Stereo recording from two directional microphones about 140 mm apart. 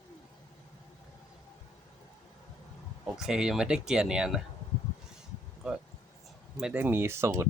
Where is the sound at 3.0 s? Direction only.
5° right (ahead or behind).